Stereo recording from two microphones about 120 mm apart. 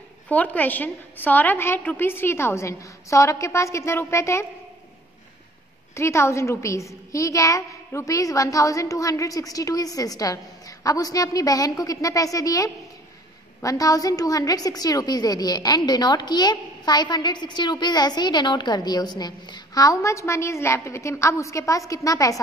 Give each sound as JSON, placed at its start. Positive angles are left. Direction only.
{"t": 0.3, "sound": "a woman's voice", "side_deg": 10}
{"t": 5.9, "sound": "a woman's voice", "side_deg": 25}